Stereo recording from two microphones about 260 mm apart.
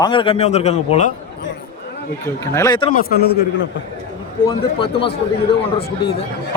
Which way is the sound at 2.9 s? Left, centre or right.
Left.